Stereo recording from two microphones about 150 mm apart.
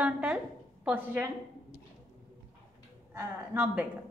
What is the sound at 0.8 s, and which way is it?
Speech, 10° right (ahead or behind).